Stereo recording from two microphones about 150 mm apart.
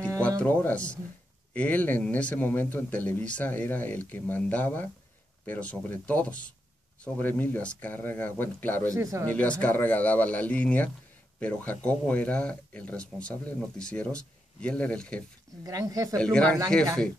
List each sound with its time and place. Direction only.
0.4 s speech: 10° left (ahead or behind)
8.8 s speech: 20° right (ahead or behind)
9.2 s speech: 10° left (ahead or behind)
15.6 s speech: 20° right (ahead or behind)
16.2 s speech: 5° left (ahead or behind)